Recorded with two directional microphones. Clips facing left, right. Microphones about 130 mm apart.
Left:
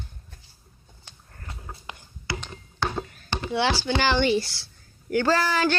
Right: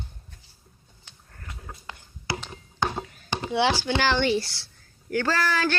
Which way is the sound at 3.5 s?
15° right (ahead or behind).